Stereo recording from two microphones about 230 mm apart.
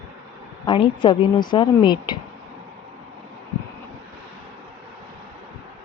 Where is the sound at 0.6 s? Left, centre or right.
Left.